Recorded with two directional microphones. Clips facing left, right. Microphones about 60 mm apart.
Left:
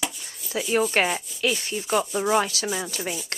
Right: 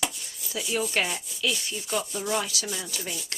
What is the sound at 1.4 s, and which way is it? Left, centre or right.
Sanding, left.